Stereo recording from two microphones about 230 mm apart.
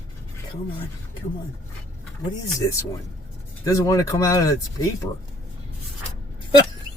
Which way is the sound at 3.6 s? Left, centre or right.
Centre.